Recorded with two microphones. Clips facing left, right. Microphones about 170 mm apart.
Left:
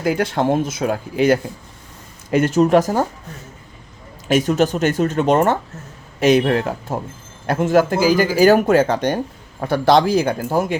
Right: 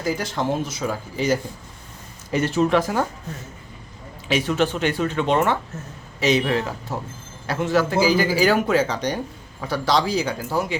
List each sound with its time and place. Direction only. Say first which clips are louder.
0.0 s speech: left 6 dB; 60° left (ahead or behind)
2.3 s speech: left 5 dB; 45° left (ahead or behind)
4.3 s speech: left 5 dB; 45° left (ahead or behind)